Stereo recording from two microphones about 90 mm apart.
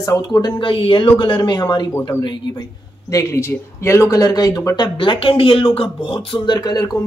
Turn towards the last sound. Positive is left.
turn(degrees=45)  # may be behind; listen again after turning